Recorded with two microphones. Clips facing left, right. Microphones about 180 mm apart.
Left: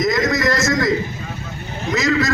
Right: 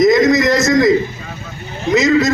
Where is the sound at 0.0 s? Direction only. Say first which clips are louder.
Right 7 dB; 20° right (ahead or behind).